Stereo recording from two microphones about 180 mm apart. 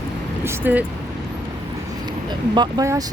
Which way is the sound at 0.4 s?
10° right (ahead or behind).